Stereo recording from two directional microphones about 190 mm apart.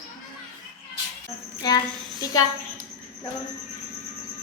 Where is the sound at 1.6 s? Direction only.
20° left (ahead or behind).